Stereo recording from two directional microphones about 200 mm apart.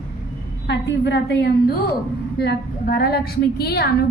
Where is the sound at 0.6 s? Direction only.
65° left (ahead or behind).